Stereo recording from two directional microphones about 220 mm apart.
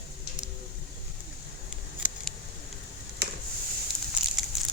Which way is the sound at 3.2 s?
45° right (ahead or behind).